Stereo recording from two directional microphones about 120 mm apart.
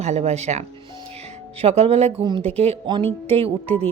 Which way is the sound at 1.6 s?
60° right (ahead or behind).